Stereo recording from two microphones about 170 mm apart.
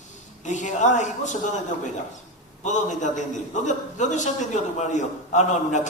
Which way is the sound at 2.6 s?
45° left (ahead or behind).